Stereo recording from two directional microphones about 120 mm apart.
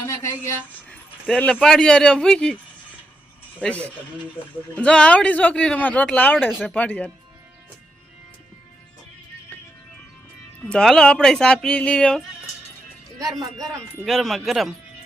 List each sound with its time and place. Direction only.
0.0 s a sound: 25° left (ahead or behind)
1.4 s a man's voice: 15° left (ahead or behind)
3.6 s speech: 10° left (ahead or behind)
6.5 s a man's voice: 5° right (ahead or behind)
6.7 s speech: 10° left (ahead or behind)
10.6 s speech: 5° left (ahead or behind)
13.1 s speech: 30° right (ahead or behind)
14.0 s a man's voice: centre (ahead or behind)